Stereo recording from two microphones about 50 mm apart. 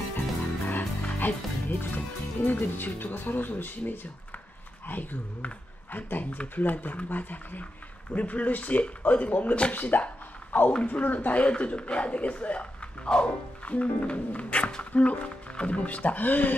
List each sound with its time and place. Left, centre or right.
0.7 s speech: left